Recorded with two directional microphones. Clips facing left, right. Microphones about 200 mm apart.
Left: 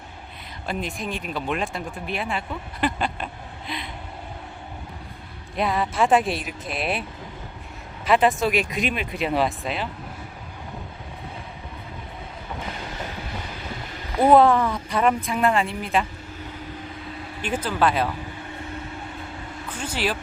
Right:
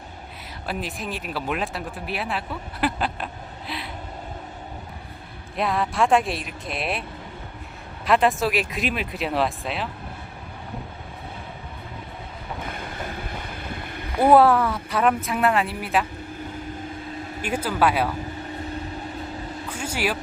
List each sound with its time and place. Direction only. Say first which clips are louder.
0.7 s speech: left 1 dB; 5° right (ahead or behind)
5.5 s speech: even; centre (ahead or behind)
8.0 s speech: left 1 dB; centre (ahead or behind)
12.6 s vehicle: even; 55° right (ahead or behind)
14.3 s speech: even; 5° right (ahead or behind)
17.4 s speech: even; 10° right (ahead or behind)
19.7 s vehicle: even; 10° right (ahead or behind)